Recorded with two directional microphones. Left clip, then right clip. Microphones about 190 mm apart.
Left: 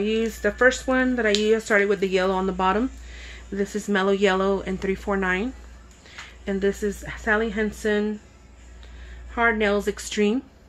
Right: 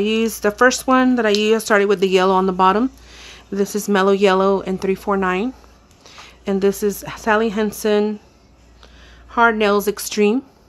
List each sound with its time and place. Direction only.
0.0 s a woman's voice: 45° right (ahead or behind)
9.3 s speech: 50° right (ahead or behind)